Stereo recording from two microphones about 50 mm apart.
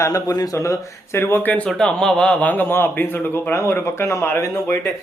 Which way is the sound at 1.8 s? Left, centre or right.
Centre.